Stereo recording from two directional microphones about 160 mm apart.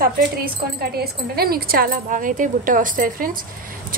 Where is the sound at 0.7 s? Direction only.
75° right (ahead or behind).